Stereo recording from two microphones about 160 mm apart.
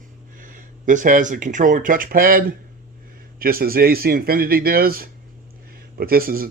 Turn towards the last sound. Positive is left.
turn(degrees=-65)  # may be behind; listen again after turning